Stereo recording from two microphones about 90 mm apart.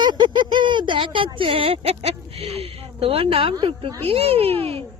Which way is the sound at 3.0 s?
90° right.